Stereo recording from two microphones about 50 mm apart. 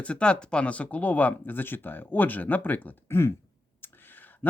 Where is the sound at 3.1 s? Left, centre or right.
Left.